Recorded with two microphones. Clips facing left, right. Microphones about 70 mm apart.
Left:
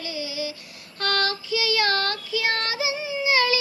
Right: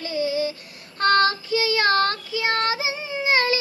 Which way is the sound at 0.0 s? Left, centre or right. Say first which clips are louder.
Right 7 dB; right.